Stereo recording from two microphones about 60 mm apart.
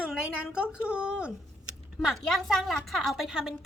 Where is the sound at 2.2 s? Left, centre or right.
Centre.